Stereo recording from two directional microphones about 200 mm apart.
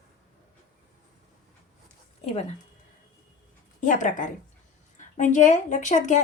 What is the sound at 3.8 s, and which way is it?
A woman's voice, 40° left (ahead or behind).